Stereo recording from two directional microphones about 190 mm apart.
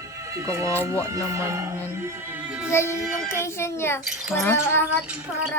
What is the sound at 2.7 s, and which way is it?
Child singing, 15° left (ahead or behind).